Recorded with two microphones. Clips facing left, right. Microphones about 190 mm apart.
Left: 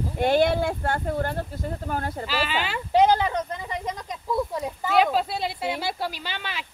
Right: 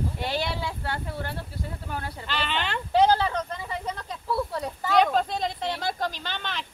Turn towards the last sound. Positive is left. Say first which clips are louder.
# even
turn(degrees=10)  # may be behind; listen again after turning